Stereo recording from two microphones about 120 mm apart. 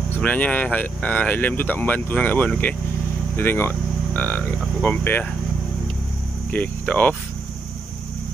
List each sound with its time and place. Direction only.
0.2 s speech: 10° left (ahead or behind)
6.5 s speech: 15° left (ahead or behind)